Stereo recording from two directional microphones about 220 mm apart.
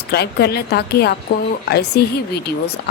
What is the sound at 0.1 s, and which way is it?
A woman's voice, 45° left (ahead or behind).